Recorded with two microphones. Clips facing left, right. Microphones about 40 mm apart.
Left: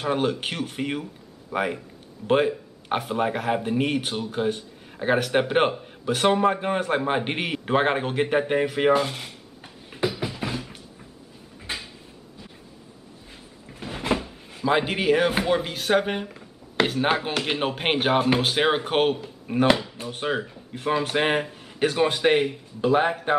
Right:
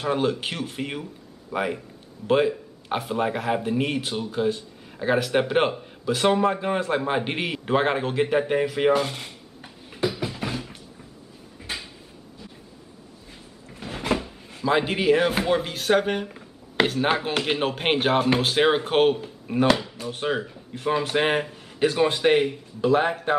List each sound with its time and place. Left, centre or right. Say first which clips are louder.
0.0 s speech: even; centre
2.9 s speech: left 1 dB; centre
4.3 s speech: right 2 dB; centre
5.1 s a man's voice: even; centre
10.0 s music: even; centre
10.3 s music: even; centre
13.7 s speech: even; centre